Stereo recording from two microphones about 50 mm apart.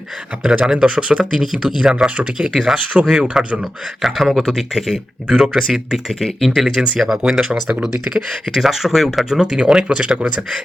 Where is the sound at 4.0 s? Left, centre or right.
Centre; by 10.3 s right.